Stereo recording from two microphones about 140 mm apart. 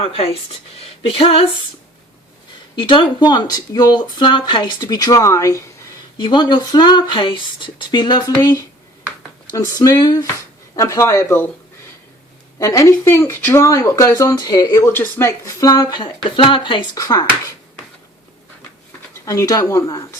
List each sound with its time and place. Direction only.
0.0 s speech: 45° left (ahead or behind)
2.7 s speech: 35° left (ahead or behind)
6.1 s speech: 30° left (ahead or behind)
12.5 s a woman's voice: 25° left (ahead or behind)
19.2 s speech: 25° left (ahead or behind)